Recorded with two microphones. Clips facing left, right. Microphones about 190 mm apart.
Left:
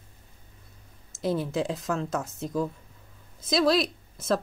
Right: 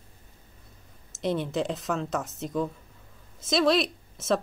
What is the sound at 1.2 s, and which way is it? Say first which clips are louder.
Speech: even; 5° left (ahead or behind).